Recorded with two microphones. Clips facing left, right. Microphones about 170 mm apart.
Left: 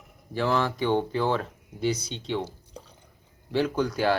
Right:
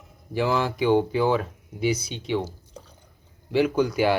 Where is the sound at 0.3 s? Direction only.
10° right (ahead or behind).